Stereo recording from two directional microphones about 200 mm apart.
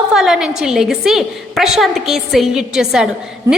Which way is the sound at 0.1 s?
Centre (ahead or behind).